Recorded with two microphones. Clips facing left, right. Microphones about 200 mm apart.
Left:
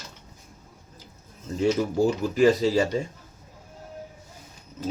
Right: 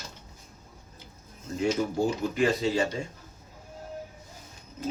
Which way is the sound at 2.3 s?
35° left (ahead or behind).